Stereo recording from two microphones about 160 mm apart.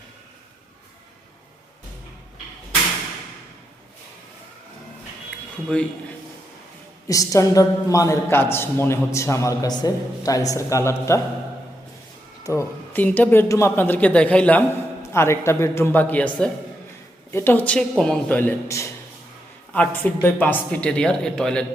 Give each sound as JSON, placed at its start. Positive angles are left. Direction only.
{"t": 5.7, "sound": "speech", "side_deg": 5}
{"t": 7.1, "sound": "a woman's voice", "side_deg": 20}
{"t": 12.4, "sound": "speech", "side_deg": 20}